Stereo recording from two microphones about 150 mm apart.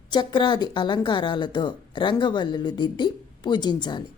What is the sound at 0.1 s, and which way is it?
A woman's voice, 30° left (ahead or behind).